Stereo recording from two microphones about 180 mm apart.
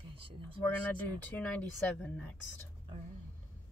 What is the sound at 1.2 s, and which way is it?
Speech, 5° left (ahead or behind).